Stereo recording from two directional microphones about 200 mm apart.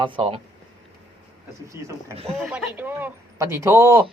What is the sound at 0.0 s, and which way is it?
Speech, 25° right (ahead or behind).